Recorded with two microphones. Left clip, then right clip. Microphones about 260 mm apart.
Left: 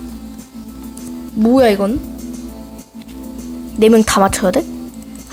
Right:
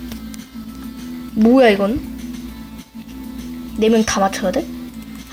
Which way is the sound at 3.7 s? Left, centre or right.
Centre.